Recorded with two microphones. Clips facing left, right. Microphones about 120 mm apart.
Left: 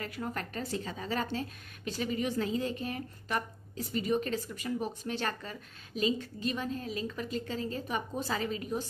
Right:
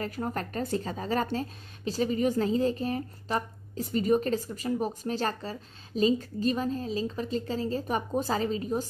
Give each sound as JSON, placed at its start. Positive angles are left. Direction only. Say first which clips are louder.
{"t": 0.0, "sound": "a woman's voice", "louder": "right 5 dB", "side_deg": -40}